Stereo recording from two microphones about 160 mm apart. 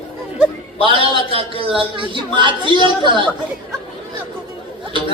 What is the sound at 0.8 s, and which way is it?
A man's voice, 35° right (ahead or behind).